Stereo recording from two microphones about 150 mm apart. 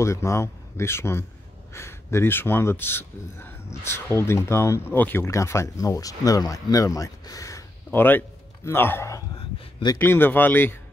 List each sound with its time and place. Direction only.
0.0 s speech: 20° left (ahead or behind)